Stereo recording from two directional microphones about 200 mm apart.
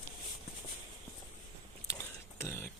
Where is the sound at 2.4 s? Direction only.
15° left (ahead or behind).